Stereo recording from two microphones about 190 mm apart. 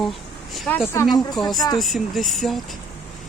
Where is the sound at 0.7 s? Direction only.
10° left (ahead or behind).